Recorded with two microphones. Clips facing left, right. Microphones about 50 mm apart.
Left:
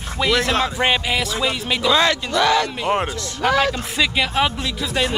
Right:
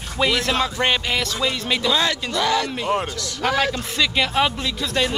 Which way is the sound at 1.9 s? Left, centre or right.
Left.